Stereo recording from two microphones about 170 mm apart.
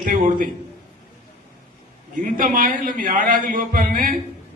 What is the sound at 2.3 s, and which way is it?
A man's voice, 55° right (ahead or behind).